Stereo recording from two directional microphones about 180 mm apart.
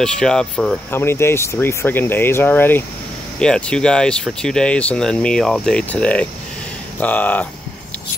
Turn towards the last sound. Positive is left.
turn(degrees=10)  # may be behind; listen again after turning